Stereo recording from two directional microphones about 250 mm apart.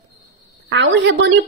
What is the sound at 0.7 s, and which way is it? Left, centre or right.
Speech, right.